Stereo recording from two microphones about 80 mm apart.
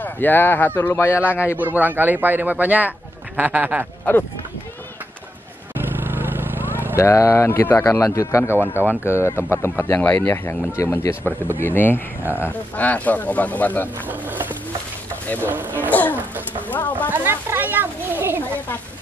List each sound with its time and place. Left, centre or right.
0.0 s speech: left
1.2 s speech: centre
4.1 s speech: left
5.8 s vehicle: right
7.0 s speech: left
8.5 s speech: right
9.0 s speech: left
12.3 s speech: right
12.7 s speech: centre
14.0 s speech: right
15.9 s speech: left
16.2 s speech: right
16.6 s speech: left
17.1 s speech: right